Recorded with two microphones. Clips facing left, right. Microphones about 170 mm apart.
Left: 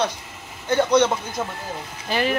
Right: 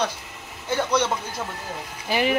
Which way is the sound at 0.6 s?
5° right (ahead or behind).